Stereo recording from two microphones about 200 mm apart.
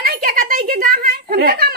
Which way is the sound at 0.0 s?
45° right (ahead or behind).